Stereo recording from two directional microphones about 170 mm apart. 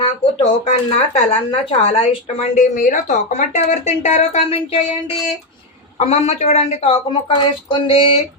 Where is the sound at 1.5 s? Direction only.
35° left (ahead or behind).